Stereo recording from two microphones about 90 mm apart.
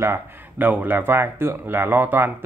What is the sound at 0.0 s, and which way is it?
Speech, 25° right (ahead or behind).